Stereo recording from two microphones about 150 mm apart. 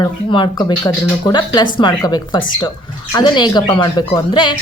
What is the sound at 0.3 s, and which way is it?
A woman's voice, 30° left (ahead or behind).